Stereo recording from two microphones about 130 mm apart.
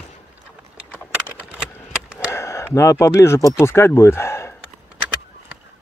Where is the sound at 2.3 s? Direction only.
20° left (ahead or behind).